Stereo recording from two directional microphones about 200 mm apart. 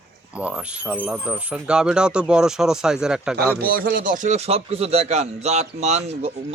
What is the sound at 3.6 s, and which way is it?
Speech, 45° right (ahead or behind).